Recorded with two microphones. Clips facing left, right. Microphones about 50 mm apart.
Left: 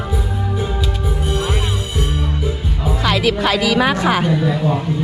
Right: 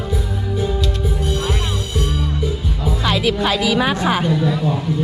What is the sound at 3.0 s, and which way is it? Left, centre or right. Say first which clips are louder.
Music: left 2 dB; left.